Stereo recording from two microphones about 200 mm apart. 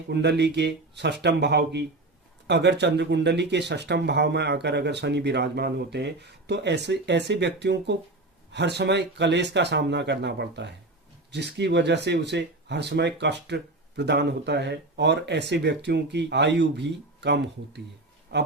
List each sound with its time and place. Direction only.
0.1 s speech: 55° right (ahead or behind)